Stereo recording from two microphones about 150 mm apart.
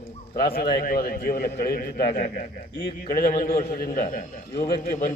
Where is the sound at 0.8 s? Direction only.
85° left.